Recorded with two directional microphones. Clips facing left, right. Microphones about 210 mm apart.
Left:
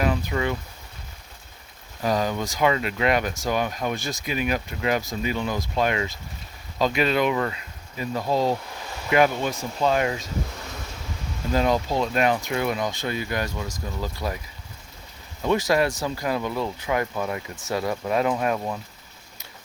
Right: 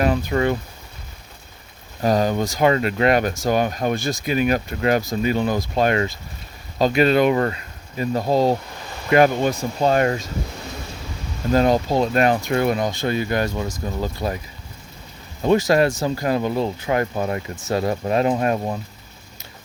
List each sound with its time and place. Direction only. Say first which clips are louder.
0.0 s speech: right 5 dB; 45° right (ahead or behind)
2.0 s speech: right 5 dB; 45° right (ahead or behind)
8.2 s speech: right 4 dB; 35° right (ahead or behind)
11.5 s speech: right 5 dB; 40° right (ahead or behind)
12.9 s speech: right 6 dB; 30° right (ahead or behind)
13.6 s speech: right 6 dB; 45° right (ahead or behind)
14.0 s speech: right 4 dB; 25° right (ahead or behind)
15.4 s speech: right 5 dB; 30° right (ahead or behind)
17.6 s speech: right 4 dB; 25° right (ahead or behind)